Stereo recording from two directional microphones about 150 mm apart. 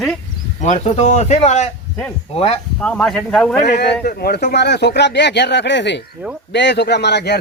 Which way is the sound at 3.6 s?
90° left.